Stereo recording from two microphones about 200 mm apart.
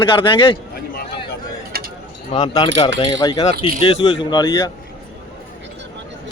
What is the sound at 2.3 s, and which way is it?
A man's voice, 20° left (ahead or behind).